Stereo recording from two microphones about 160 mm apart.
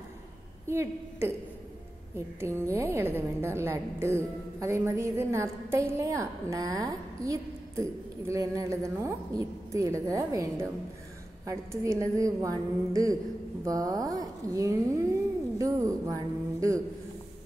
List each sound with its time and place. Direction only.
0.7 s a woman's voice: 15° right (ahead or behind)